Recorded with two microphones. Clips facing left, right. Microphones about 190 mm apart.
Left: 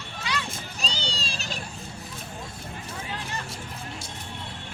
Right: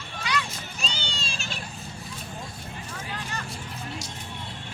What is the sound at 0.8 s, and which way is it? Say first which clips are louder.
Children playing: left 2 dB; 35° left (ahead or behind).